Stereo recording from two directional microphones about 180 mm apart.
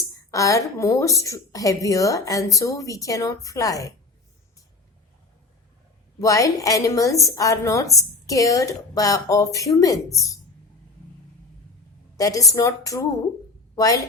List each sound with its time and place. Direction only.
0.3 s a woman's voice: 15° left (ahead or behind)
6.1 s a woman's voice: 20° left (ahead or behind)
12.1 s a woman's voice: 20° left (ahead or behind)